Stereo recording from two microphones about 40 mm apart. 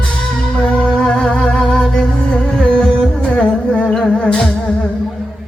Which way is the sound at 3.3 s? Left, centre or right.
Left.